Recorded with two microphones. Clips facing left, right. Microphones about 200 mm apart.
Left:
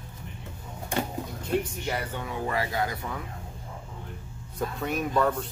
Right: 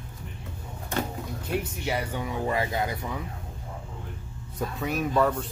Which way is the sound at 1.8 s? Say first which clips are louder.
Right 2 dB; 10° right (ahead or behind).